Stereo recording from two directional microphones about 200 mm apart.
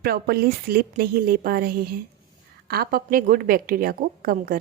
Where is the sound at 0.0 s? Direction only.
50° right (ahead or behind).